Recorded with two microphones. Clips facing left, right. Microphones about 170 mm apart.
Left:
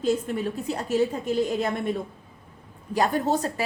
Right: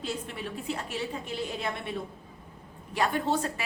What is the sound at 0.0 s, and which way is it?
A woman's voice, 45° left (ahead or behind).